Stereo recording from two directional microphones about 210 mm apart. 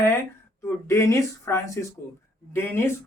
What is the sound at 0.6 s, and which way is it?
Speech, 15° left (ahead or behind).